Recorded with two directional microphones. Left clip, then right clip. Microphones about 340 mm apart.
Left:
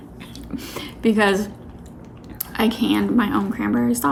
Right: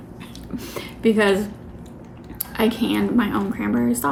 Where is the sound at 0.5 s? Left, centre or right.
Centre.